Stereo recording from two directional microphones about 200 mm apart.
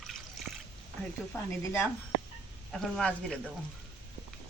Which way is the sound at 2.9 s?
5° left (ahead or behind).